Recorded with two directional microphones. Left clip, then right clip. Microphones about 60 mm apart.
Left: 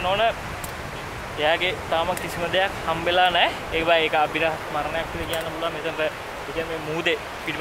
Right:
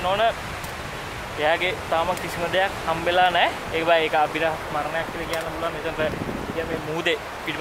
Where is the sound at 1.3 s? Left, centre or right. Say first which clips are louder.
Even; centre.